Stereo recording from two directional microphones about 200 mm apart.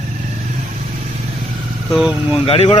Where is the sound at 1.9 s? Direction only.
5° right (ahead or behind).